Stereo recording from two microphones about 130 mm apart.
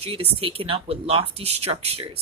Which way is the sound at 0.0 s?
45° right (ahead or behind).